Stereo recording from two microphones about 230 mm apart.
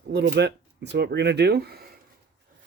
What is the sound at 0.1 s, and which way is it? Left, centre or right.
Speech, right.